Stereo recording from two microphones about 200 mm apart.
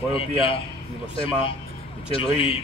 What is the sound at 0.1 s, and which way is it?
A man's voice, 25° left (ahead or behind).